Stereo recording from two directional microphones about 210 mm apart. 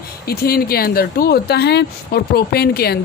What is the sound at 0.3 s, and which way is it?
A woman's voice, 45° left (ahead or behind).